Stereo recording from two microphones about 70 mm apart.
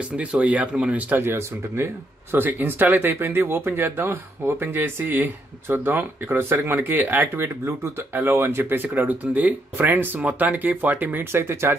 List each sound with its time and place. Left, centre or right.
0.1 s speech: centre
1.0 s speech: right
11.3 s speech: right